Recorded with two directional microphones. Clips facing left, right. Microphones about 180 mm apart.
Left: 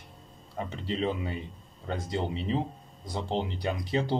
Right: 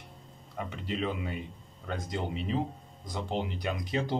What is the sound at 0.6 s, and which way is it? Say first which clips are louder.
Speech: left 2 dB; 30° left (ahead or behind).